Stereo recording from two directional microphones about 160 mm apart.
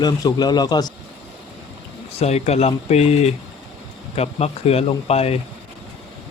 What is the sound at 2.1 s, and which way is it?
Speech, 40° left (ahead or behind).